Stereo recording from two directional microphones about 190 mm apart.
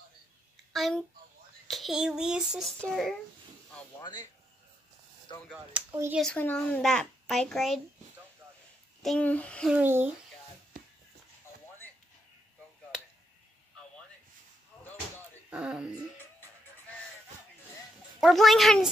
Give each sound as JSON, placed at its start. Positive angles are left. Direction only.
{"t": 0.7, "sound": "a child's voice", "side_deg": 0}
{"t": 4.0, "sound": "speech", "side_deg": 20}
{"t": 5.5, "sound": "speech", "side_deg": -10}
{"t": 6.2, "sound": "a child's voice", "side_deg": 5}
{"t": 9.0, "sound": "a child's voice", "side_deg": 5}
{"t": 9.8, "sound": "speech", "side_deg": -10}
{"t": 15.5, "sound": "a child's voice", "side_deg": -5}
{"t": 18.2, "sound": "a child's voice", "side_deg": 0}